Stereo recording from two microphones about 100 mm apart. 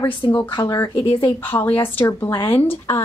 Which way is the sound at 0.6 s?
30° left (ahead or behind).